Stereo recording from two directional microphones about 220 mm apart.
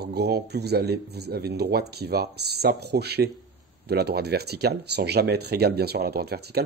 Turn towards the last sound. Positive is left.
turn(degrees=-45)  # may be behind; listen again after turning